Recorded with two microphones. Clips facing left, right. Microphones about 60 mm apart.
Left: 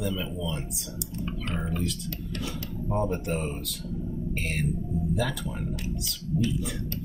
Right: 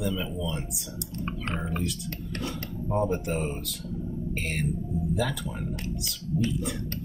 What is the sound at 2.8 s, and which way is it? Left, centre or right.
Speech, centre.